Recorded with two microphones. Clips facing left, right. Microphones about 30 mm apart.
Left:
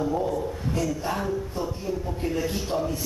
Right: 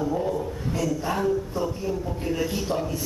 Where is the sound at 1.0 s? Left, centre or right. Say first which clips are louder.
Right 3 dB; centre.